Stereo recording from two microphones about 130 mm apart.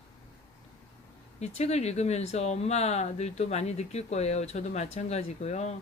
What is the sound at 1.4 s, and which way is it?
Speech, 55° left (ahead or behind).